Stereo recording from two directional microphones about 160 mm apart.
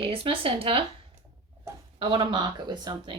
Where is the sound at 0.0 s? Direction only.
35° right (ahead or behind).